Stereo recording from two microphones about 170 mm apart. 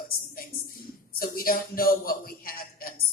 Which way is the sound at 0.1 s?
60° left (ahead or behind).